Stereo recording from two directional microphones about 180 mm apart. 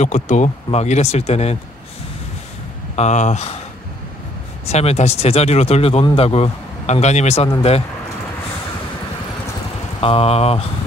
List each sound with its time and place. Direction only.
0.0 s speech: 40° left (ahead or behind)
3.0 s speech: 40° left (ahead or behind)
4.6 s speech: 35° left (ahead or behind)
9.9 s speech: 30° left (ahead or behind)